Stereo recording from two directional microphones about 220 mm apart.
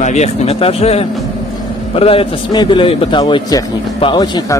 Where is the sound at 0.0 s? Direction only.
30° left (ahead or behind).